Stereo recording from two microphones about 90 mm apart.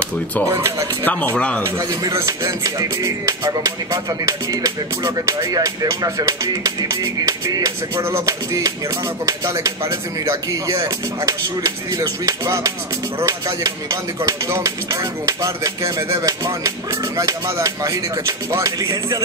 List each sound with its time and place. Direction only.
0.5 s speech: 35° right (ahead or behind)
1.0 s speech: 15° left (ahead or behind)
2.0 s speech: 35° right (ahead or behind)
15.8 s speech: 30° right (ahead or behind)
16.2 s speech: 45° right (ahead or behind)